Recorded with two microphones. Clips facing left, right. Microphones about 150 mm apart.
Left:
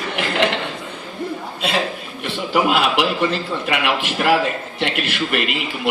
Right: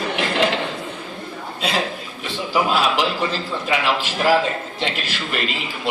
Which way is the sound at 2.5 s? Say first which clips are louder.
Left 2 dB; 65° left (ahead or behind).